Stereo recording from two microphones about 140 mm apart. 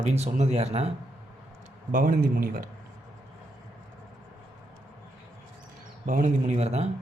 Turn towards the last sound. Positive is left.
turn(degrees=-50)  # may be behind; listen again after turning